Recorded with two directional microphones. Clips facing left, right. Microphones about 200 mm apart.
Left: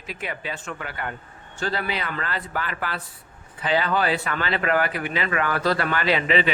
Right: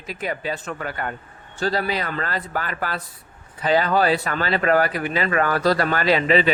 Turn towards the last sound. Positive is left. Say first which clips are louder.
# right 4 dB
turn(degrees=-40)  # may be behind; listen again after turning